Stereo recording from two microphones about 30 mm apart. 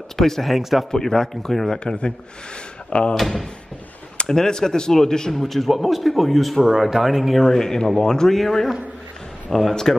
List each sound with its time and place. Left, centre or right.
0.2 s speech: centre
0.6 s speech: centre
0.9 s speech: centre
1.4 s speech: centre
2.9 s speech: left
3.2 s speech: centre
4.3 s speech: left
5.3 s speech: centre
6.6 s speech: centre
7.4 s speech: centre